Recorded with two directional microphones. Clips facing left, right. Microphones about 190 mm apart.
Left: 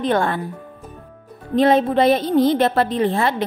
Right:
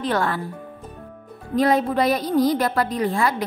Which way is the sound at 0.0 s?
25° left (ahead or behind).